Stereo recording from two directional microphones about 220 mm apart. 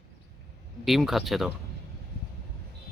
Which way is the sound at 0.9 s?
Centre (ahead or behind).